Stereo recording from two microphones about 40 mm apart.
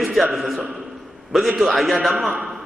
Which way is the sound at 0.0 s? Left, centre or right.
Centre.